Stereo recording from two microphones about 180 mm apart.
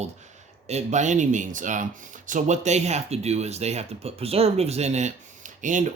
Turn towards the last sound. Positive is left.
turn(degrees=-45)  # may be behind; listen again after turning